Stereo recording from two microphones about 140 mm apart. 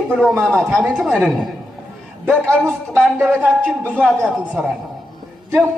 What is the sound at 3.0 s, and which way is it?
Music, 5° right (ahead or behind).